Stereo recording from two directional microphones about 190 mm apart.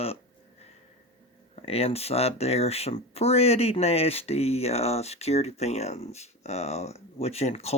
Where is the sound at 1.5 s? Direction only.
30° left (ahead or behind).